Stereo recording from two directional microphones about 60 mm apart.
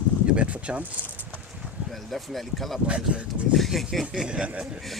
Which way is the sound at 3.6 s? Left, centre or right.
Centre.